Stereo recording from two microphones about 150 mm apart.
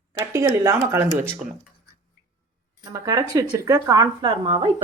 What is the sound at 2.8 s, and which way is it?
Speech, 25° right (ahead or behind).